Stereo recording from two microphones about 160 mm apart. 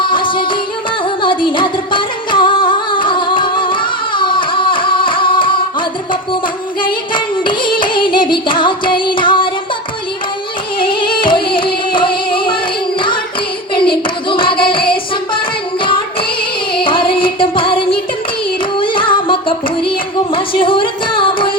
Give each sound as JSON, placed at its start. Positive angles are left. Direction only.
{"t": 0.1, "sound": "music", "side_deg": 30}
{"t": 7.8, "sound": "music", "side_deg": 30}
{"t": 10.8, "sound": "music", "side_deg": 30}
{"t": 13.8, "sound": "hands", "side_deg": 30}
{"t": 16.8, "sound": "music", "side_deg": 30}